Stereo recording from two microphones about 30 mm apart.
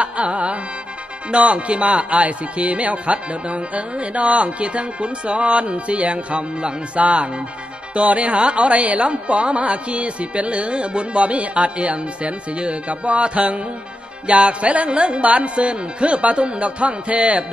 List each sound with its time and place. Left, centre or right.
0.0 s music: right
1.3 s speech: right
8.7 s a woman's voice: right
9.0 s speech: right